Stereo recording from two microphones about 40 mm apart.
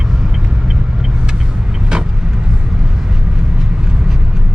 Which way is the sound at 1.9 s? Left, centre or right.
Right.